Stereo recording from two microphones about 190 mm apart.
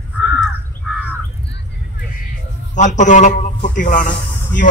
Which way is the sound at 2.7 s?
40° left (ahead or behind).